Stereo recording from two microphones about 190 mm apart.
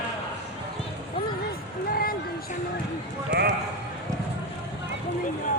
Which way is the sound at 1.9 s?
50° left (ahead or behind).